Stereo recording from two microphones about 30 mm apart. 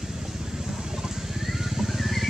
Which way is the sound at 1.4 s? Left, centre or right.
Centre.